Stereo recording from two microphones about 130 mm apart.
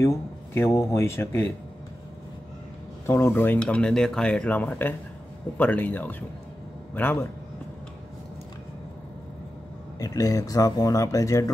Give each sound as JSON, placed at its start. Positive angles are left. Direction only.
{"t": 0.0, "sound": "speech", "side_deg": 20}
{"t": 3.1, "sound": "a man's voice", "side_deg": 20}
{"t": 9.9, "sound": "speech", "side_deg": 30}